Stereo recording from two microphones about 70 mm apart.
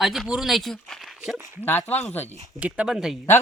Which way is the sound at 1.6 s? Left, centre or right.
Left.